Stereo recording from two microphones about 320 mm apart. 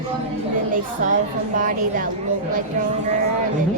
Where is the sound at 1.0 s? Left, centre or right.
Right.